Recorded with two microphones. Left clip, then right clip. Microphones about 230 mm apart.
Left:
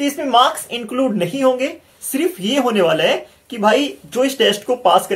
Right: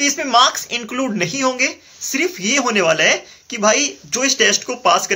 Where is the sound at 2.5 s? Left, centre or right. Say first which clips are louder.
Even; centre.